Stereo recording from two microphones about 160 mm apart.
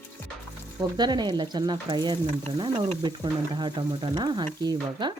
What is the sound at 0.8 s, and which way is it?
Speech, 25° right (ahead or behind).